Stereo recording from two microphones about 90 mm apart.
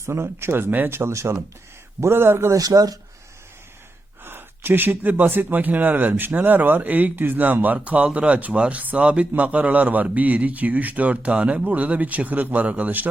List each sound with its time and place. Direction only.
0.0 s speech: 30° right (ahead or behind)
2.6 s speech: 45° right (ahead or behind)
4.2 s speech: 25° right (ahead or behind)